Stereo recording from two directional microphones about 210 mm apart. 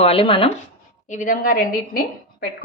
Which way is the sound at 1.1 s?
40° left (ahead or behind).